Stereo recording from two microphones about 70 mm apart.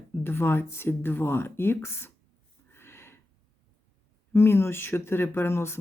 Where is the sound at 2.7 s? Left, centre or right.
Left.